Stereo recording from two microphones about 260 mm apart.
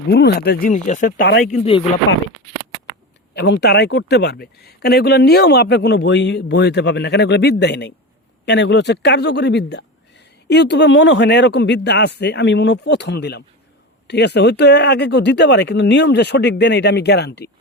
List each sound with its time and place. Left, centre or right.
0.1 s speech: left
3.3 s speech: left